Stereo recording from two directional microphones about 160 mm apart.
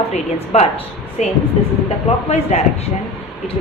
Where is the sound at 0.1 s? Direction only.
45° left (ahead or behind).